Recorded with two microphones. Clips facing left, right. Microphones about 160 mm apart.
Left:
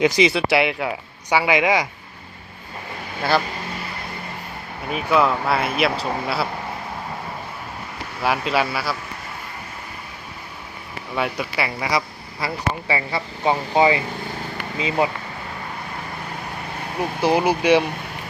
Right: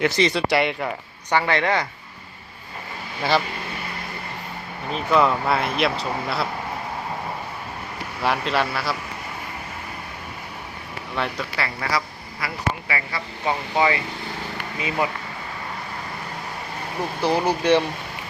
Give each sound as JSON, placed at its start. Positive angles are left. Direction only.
{"t": 0.0, "sound": "speech", "side_deg": 10}
{"t": 3.2, "sound": "speech", "side_deg": 0}
{"t": 4.9, "sound": "speech", "side_deg": 5}
{"t": 8.2, "sound": "speech", "side_deg": 5}
{"t": 11.1, "sound": "speech", "side_deg": 10}
{"t": 17.2, "sound": "speech", "side_deg": 15}